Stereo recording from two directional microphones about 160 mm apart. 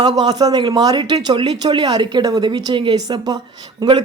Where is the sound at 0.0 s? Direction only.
30° right (ahead or behind).